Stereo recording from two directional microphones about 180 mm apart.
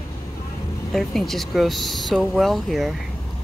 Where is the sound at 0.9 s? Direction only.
Centre (ahead or behind).